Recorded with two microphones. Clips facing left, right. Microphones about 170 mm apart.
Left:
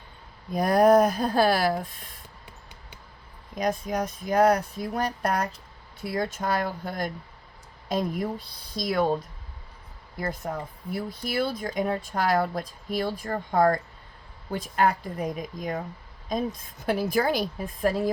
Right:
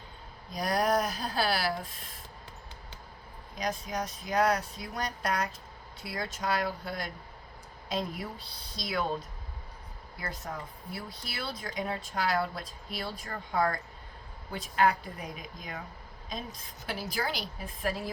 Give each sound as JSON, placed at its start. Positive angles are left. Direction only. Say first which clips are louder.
{"t": 0.5, "sound": "speech", "louder": "left 9 dB", "side_deg": 50}
{"t": 3.5, "sound": "speech", "louder": "left 7 dB", "side_deg": 50}
{"t": 10.2, "sound": "speech", "louder": "left 8 dB", "side_deg": 50}